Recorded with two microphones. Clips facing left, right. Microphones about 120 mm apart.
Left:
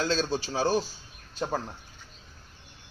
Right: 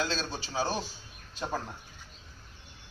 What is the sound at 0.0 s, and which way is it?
Speech, 40° left (ahead or behind).